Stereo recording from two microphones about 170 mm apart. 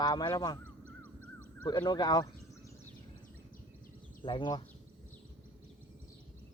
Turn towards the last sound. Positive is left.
turn(degrees=25)  # may be behind; listen again after turning